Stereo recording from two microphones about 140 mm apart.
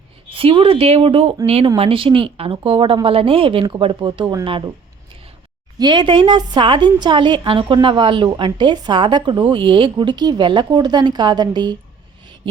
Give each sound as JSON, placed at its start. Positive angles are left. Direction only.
{"t": 0.3, "sound": "a woman's voice", "side_deg": -40}
{"t": 5.8, "sound": "a woman's voice", "side_deg": -35}